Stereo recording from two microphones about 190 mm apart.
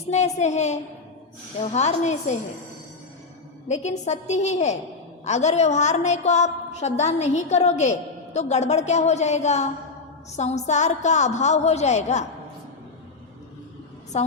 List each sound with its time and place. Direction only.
0.1 s a woman's voice: 35° left (ahead or behind)
3.7 s a woman's voice: 35° left (ahead or behind)
14.1 s a woman's voice: 35° left (ahead or behind)